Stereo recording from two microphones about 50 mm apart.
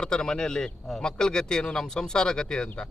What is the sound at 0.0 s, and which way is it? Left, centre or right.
A man's voice, centre.